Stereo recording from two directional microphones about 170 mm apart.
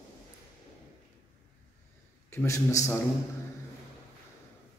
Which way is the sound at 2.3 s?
15° left (ahead or behind).